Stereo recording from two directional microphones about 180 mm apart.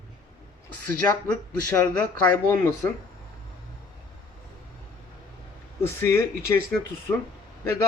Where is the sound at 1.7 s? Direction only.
10° left (ahead or behind).